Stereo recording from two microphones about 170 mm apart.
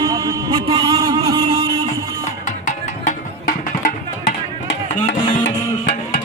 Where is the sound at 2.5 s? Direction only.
45° left (ahead or behind).